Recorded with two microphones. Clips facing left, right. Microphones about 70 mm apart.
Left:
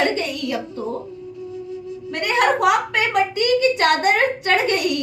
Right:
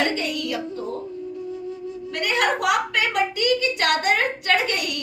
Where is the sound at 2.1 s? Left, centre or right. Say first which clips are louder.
Left 4 dB; left.